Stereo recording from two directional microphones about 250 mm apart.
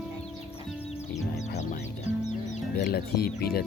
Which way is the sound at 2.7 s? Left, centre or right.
Left.